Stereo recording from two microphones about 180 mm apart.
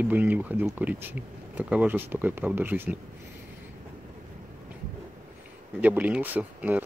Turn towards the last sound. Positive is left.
turn(degrees=-10)  # may be behind; listen again after turning